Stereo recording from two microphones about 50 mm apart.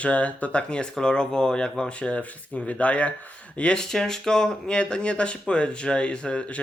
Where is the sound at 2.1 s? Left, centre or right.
Left.